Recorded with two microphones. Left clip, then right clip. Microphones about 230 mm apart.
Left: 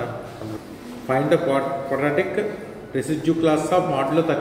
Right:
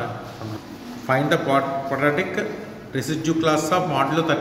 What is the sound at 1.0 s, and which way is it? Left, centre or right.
A man's voice, right.